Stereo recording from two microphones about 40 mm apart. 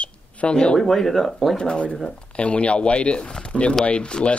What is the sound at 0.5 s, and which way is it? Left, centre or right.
Speech, left.